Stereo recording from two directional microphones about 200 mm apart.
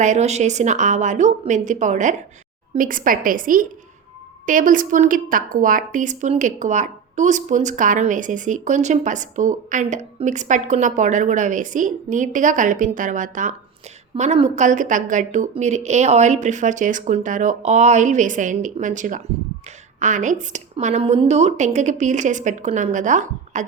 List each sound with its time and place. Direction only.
0.0 s a woman's voice: 35° right (ahead or behind)